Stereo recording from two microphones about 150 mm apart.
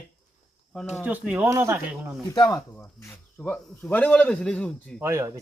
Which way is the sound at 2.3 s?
25° left (ahead or behind).